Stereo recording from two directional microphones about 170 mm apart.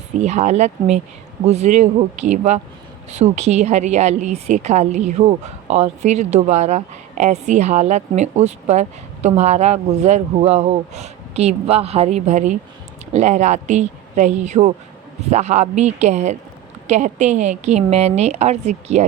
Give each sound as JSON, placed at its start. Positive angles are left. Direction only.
{"t": 0.2, "sound": "a woman's voice", "side_deg": -40}